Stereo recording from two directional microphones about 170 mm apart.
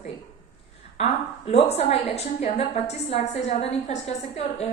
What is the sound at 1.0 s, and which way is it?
A woman's voice, 35° left (ahead or behind).